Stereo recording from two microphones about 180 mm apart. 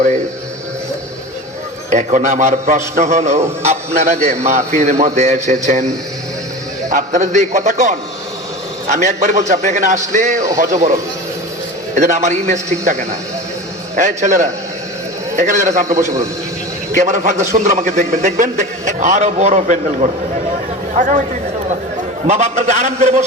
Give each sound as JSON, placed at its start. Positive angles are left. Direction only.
{"t": 1.9, "sound": "a man's voice", "side_deg": -45}
{"t": 6.9, "sound": "a man's voice", "side_deg": -40}
{"t": 11.9, "sound": "a man's voice", "side_deg": -40}
{"t": 16.0, "sound": "a man's voice", "side_deg": -15}
{"t": 16.9, "sound": "a man's voice", "side_deg": -40}
{"t": 22.3, "sound": "a man's voice", "side_deg": -40}